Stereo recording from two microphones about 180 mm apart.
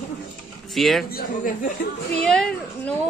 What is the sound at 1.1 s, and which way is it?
Speech, 50° left (ahead or behind).